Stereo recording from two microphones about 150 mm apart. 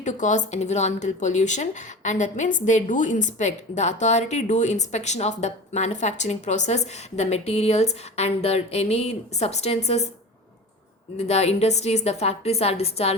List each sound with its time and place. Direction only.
0.0 s speech: 55° left (ahead or behind)
11.2 s speech: 45° left (ahead or behind)